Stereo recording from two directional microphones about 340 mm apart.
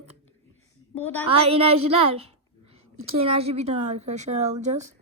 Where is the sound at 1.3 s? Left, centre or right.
Centre.